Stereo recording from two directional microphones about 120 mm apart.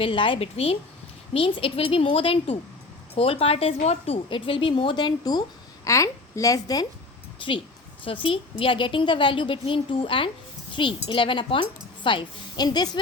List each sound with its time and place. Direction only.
0.0 s a woman's voice: 45° left (ahead or behind); by 6.8 s 30° left (ahead or behind)
8.0 s a woman's voice: 45° left (ahead or behind)